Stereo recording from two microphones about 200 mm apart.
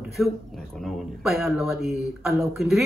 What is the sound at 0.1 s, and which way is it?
Speech, centre (ahead or behind).